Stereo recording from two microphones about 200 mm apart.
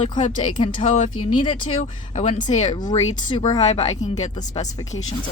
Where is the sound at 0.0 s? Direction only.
35° left (ahead or behind).